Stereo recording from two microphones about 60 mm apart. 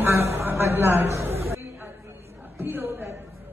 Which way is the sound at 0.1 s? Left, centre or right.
Right.